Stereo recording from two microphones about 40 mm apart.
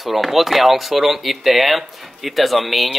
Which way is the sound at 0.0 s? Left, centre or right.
Centre.